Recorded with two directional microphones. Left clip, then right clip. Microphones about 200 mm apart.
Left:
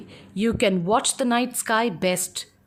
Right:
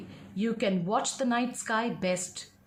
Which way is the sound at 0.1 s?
50° left (ahead or behind).